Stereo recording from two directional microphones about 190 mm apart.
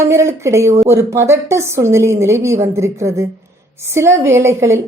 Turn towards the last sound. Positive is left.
turn(degrees=-15)  # may be behind; listen again after turning